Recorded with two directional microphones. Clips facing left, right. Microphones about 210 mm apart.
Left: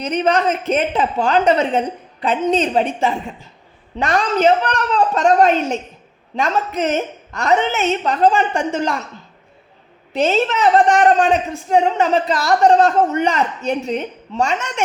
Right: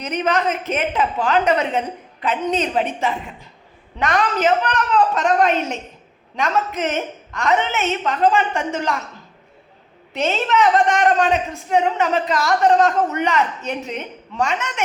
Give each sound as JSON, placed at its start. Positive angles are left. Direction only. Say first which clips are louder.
{"t": 0.0, "sound": "a woman's voice", "louder": "left 3 dB", "side_deg": 30}
{"t": 10.1, "sound": "a woman's voice", "louder": "left 4 dB", "side_deg": 35}